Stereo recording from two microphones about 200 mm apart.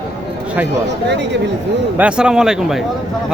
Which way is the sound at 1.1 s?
60° right (ahead or behind).